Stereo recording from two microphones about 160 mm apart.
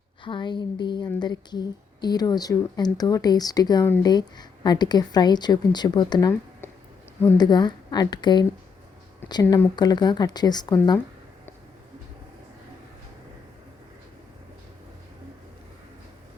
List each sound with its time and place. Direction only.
0.3 s speech: 30° left (ahead or behind)
7.3 s speech: 25° left (ahead or behind)